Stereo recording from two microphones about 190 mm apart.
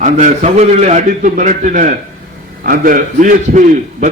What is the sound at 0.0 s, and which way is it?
A man's voice, 40° right (ahead or behind).